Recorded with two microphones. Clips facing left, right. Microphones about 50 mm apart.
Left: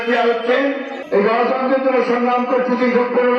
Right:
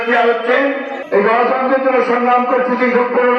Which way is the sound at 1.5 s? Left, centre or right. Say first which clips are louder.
Right 2 dB; right.